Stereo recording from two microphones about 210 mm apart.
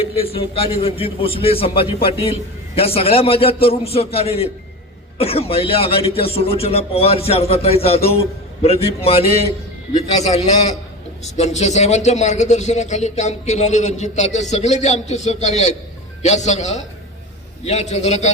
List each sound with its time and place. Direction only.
0.0 s a man's voice: 25° left (ahead or behind)